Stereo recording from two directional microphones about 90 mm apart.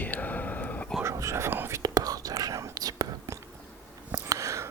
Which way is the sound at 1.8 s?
45° right (ahead or behind).